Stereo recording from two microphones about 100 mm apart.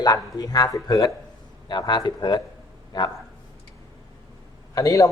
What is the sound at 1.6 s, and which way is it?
Speech, 50° left (ahead or behind).